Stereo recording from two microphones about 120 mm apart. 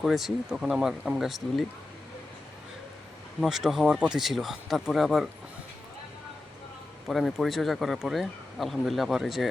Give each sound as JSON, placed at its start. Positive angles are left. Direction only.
{"t": 0.0, "sound": "speech", "side_deg": 0}
{"t": 3.4, "sound": "speech", "side_deg": 0}
{"t": 7.1, "sound": "speech", "side_deg": 0}